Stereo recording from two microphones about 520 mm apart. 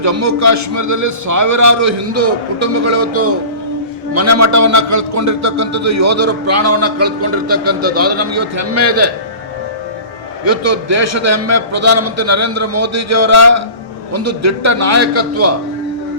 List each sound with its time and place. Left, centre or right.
0.0 s a man's voice: right
10.4 s a man's voice: right